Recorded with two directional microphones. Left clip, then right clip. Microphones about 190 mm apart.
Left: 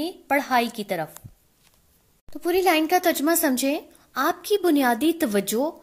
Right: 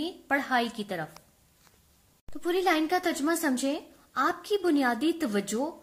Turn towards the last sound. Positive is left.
turn(degrees=45)  # may be behind; listen again after turning